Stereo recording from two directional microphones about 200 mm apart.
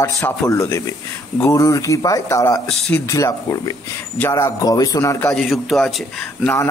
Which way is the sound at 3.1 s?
15° left (ahead or behind).